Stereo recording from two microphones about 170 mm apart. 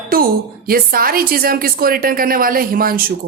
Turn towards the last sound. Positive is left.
turn(degrees=-60)  # may be behind; listen again after turning